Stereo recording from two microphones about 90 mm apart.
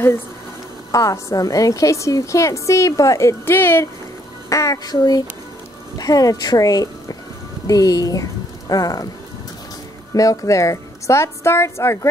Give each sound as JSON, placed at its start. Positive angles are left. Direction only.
{"t": 0.9, "sound": "a woman's voice", "side_deg": 40}
{"t": 4.5, "sound": "a child's voice", "side_deg": 40}
{"t": 10.1, "sound": "a woman's voice", "side_deg": 40}